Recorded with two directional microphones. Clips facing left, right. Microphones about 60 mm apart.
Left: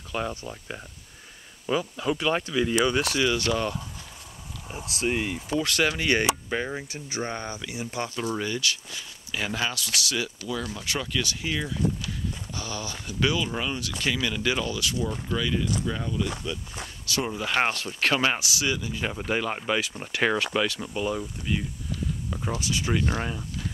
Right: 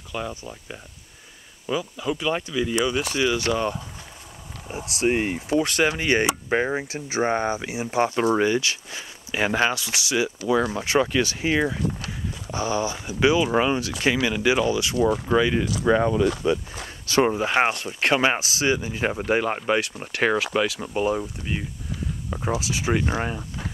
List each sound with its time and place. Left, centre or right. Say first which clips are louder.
0.1 s speech: even; centre
1.7 s speech: even; centre
3.5 s speech: right 3 dB; centre
4.6 s speech: right 5 dB; centre
5.1 s speech: right 4 dB; right
13.5 s speech: right 9 dB; right
15.8 s speech: right 10 dB; right
16.8 s speech: right 9 dB; right
17.6 s speech: right 3 dB; centre
19.1 s speech: right 5 dB; centre
20.8 s speech: right 5 dB; right